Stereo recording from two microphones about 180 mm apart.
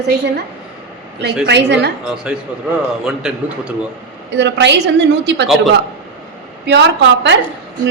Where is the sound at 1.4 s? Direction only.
75° right (ahead or behind).